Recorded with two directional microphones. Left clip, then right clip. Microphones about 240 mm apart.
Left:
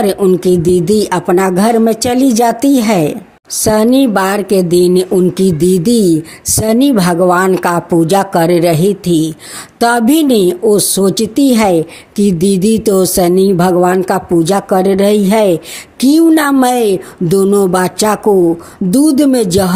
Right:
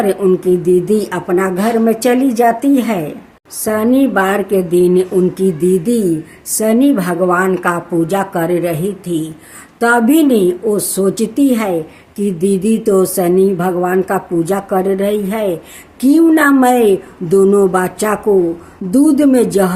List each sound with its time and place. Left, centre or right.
0.0 s speech: left